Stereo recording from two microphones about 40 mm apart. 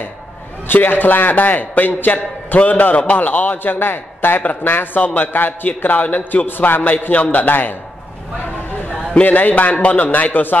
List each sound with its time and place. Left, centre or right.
0.7 s a man's voice: left
2.6 s a man's voice: left
3.6 s a man's voice: left
4.6 s a man's voice: left
6.4 s a man's voice: left
9.1 s a man's voice: left